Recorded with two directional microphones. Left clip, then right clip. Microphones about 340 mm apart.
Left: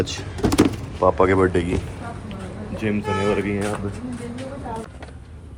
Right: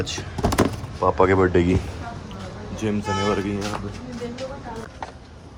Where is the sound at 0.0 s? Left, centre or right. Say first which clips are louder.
Left 2 dB; centre.